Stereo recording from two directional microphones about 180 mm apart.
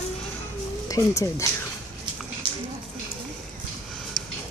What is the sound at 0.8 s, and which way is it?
Speech, 20° left (ahead or behind).